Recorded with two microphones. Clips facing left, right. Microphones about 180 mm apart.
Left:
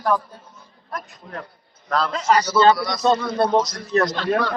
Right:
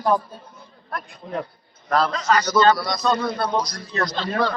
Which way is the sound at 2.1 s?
30° left (ahead or behind).